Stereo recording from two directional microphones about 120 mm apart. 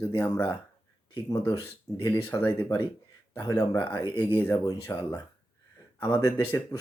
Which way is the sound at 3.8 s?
20° left (ahead or behind).